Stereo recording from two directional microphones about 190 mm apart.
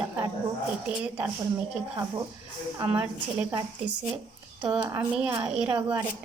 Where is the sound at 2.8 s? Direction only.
5° right (ahead or behind).